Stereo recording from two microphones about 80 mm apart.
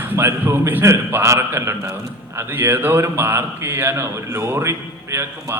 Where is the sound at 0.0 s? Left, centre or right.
Right.